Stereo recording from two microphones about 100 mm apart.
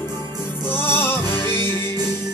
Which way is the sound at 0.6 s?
20° left (ahead or behind).